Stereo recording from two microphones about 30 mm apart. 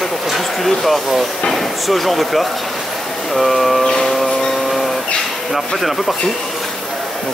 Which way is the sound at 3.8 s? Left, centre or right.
Centre.